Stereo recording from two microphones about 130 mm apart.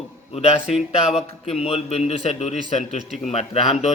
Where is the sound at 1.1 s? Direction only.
55° left (ahead or behind).